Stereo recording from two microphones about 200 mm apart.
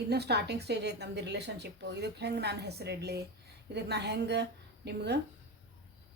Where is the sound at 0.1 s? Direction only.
55° right (ahead or behind).